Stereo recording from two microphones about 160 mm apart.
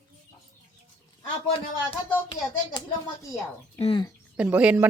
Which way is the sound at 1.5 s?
35° left (ahead or behind).